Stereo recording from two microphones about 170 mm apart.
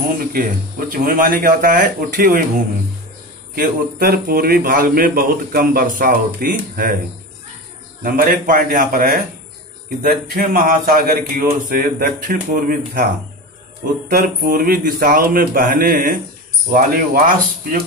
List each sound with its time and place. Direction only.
0.0 s a man's voice: 60° right (ahead or behind)
3.5 s a man's voice: 60° right (ahead or behind)
8.0 s a man's voice: 55° right (ahead or behind)